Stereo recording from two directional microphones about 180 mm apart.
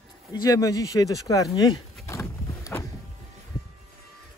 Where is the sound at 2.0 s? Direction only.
15° left (ahead or behind).